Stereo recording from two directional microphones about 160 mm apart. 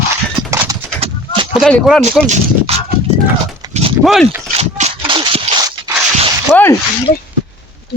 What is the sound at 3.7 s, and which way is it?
Dog, 40° right (ahead or behind).